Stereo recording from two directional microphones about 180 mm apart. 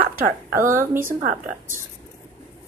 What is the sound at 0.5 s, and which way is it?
Speech, 15° right (ahead or behind).